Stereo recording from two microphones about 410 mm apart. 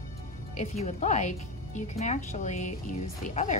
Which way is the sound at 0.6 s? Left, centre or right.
Centre.